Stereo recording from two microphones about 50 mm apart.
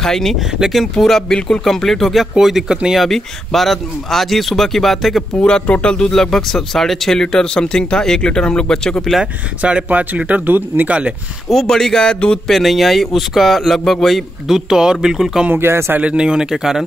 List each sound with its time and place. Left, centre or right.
0.0 s speech: centre
0.4 s speech: centre
2.3 s speech: centre
5.5 s speech: left
9.2 s speech: right
10.4 s speech: right
10.9 s speech: right
11.5 s speech: centre
12.4 s speech: centre
14.7 s speech: centre
15.5 s speech: right
16.0 s speech: right